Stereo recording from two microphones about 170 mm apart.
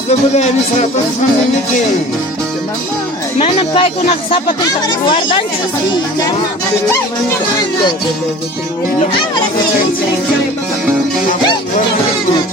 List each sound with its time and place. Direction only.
0.1 s speech: 40° left (ahead or behind)
3.3 s speech: 35° left (ahead or behind)